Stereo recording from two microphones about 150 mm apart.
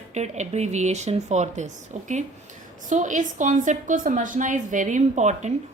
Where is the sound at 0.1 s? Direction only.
50° right (ahead or behind).